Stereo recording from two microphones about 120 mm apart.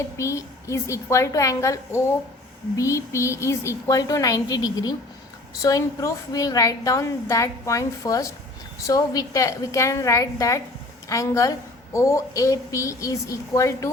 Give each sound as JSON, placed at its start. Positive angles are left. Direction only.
{"t": 0.2, "sound": "a woman's voice", "side_deg": 25}